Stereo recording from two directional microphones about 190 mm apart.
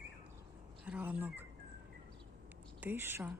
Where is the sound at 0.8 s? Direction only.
5° right (ahead or behind).